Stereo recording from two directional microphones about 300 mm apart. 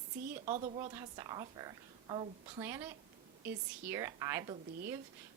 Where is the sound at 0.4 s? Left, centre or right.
Right.